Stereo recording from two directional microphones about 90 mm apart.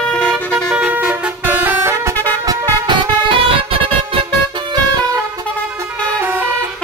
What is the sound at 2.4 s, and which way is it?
Vehicle, 60° right (ahead or behind).